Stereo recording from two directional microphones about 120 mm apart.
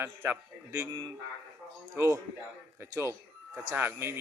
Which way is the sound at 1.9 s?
20° right (ahead or behind).